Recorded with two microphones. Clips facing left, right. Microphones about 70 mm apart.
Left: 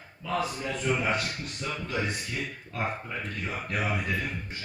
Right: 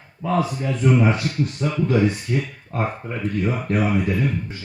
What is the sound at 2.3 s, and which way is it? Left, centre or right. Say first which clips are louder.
Speech: right 10 dB; right.